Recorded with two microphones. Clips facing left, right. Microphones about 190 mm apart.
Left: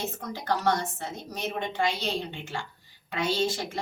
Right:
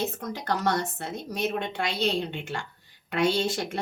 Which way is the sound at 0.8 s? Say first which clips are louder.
Right 3 dB; 65° right (ahead or behind).